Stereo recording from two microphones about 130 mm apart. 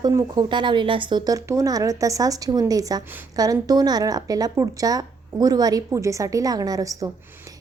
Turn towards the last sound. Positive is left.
turn(degrees=-25)  # may be behind; listen again after turning